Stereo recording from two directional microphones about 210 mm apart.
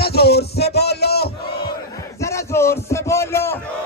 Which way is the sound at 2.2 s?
15° left (ahead or behind).